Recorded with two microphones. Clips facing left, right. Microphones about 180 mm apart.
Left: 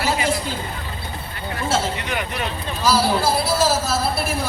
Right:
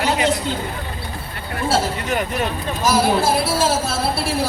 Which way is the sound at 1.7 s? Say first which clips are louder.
Right 3 dB; 40° right (ahead or behind).